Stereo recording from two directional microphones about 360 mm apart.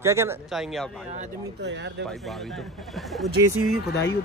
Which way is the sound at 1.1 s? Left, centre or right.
Right.